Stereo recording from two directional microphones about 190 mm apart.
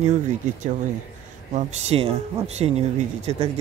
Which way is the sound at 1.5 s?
35° right (ahead or behind).